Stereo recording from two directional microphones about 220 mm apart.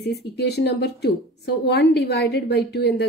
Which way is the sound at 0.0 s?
50° left (ahead or behind).